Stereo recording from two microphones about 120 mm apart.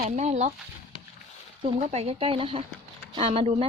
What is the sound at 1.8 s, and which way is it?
Speech, 65° right (ahead or behind).